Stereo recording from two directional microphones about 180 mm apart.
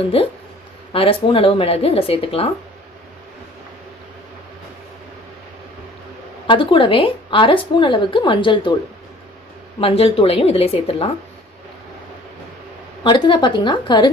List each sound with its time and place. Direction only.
0.1 s speech: 30° left (ahead or behind)
6.4 s a woman's voice: 30° left (ahead or behind)
9.8 s speech: 30° left (ahead or behind)
13.0 s a woman's voice: 25° left (ahead or behind)